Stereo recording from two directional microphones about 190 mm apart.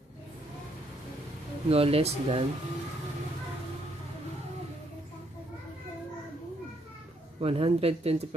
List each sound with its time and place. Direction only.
1.7 s speech: 30° right (ahead or behind)
7.3 s speech: 30° right (ahead or behind)